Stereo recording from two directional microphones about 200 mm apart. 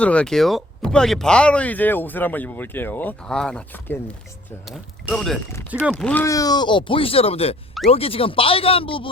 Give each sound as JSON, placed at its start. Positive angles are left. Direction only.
{"t": 0.0, "sound": "speech", "side_deg": 5}
{"t": 5.5, "sound": "speech", "side_deg": 15}